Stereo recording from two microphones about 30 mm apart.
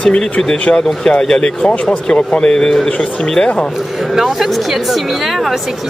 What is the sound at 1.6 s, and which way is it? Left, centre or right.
Speech, left.